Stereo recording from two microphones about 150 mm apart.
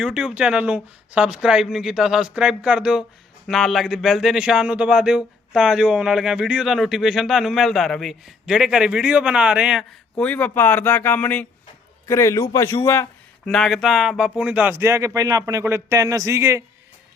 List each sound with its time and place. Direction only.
0.0 s speech: 5° right (ahead or behind)
10.2 s a man's voice: 10° left (ahead or behind)
13.4 s speech: 5° left (ahead or behind); by 16.6 s 20° right (ahead or behind)